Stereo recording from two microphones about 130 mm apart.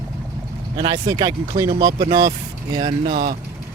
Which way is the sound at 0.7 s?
35° right (ahead or behind).